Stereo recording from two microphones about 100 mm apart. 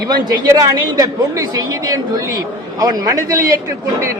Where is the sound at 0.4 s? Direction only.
35° right (ahead or behind).